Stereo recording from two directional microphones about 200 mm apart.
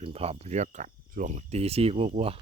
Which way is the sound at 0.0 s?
30° right (ahead or behind).